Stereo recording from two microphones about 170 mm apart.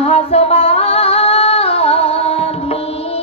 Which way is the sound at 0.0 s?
35° left (ahead or behind).